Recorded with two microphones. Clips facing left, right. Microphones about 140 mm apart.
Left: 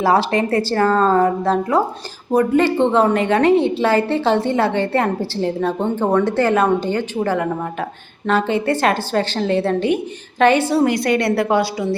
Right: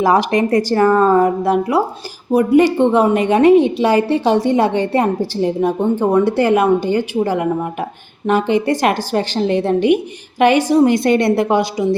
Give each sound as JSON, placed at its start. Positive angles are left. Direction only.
{"t": 0.0, "sound": "a woman's voice", "side_deg": -15}